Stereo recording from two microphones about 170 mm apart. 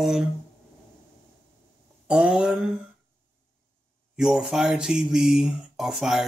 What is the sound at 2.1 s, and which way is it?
Speech, 5° right (ahead or behind).